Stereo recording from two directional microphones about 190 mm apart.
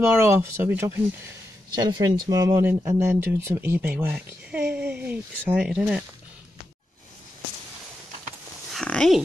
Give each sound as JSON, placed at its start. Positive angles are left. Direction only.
{"t": 0.0, "sound": "speech", "side_deg": -15}
{"t": 8.7, "sound": "dog", "side_deg": 5}